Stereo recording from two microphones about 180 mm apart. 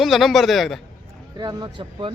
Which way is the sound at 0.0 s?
Centre (ahead or behind).